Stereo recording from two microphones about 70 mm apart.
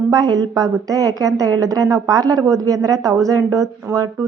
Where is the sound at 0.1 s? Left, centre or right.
Right.